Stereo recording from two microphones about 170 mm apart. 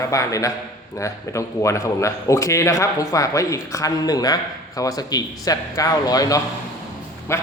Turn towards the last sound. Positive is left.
turn(degrees=15)  # may be behind; listen again after turning